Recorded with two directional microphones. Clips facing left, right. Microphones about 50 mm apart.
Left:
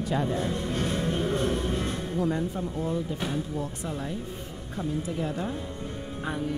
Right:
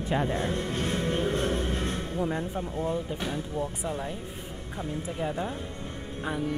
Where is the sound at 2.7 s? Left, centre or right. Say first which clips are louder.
Right 1 dB; right.